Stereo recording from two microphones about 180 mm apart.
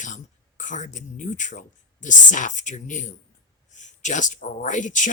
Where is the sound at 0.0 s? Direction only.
45° left (ahead or behind).